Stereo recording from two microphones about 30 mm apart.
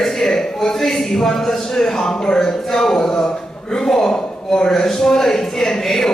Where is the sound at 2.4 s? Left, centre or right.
Centre.